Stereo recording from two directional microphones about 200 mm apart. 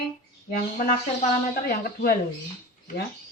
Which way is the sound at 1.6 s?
50° left (ahead or behind).